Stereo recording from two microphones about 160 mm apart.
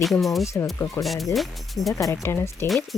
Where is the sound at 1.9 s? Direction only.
20° left (ahead or behind).